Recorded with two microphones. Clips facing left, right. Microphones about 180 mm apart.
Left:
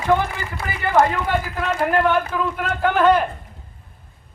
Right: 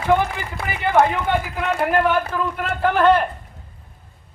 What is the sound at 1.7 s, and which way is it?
A man's voice, centre (ahead or behind).